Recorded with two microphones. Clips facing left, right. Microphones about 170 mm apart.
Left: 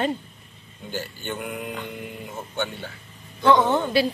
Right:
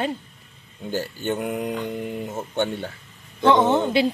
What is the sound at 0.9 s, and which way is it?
Speech, 40° right (ahead or behind).